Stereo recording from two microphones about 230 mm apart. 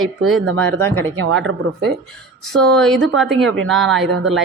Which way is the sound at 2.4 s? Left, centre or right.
Centre.